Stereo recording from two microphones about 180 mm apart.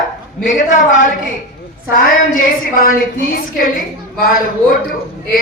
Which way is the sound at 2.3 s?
50° left (ahead or behind).